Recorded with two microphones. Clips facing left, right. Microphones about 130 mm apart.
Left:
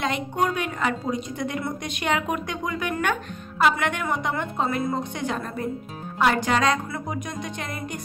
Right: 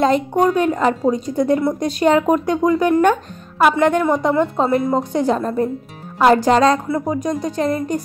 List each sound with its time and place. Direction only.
0.0 s speech: 40° right (ahead or behind)